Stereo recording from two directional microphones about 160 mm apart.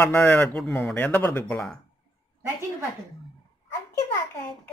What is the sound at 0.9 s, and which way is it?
Speech, 15° left (ahead or behind).